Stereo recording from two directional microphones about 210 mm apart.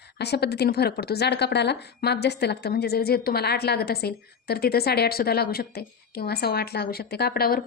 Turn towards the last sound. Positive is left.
turn(degrees=45)  # may be behind; listen again after turning